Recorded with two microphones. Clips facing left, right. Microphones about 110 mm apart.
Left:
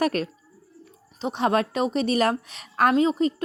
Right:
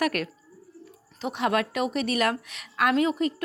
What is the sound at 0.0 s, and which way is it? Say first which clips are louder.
A woman's voice: left 3 dB; 30° left (ahead or behind).